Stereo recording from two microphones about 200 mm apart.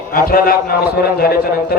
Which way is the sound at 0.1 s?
50° left (ahead or behind).